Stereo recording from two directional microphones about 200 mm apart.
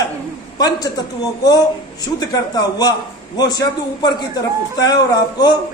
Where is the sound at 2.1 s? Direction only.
20° left (ahead or behind).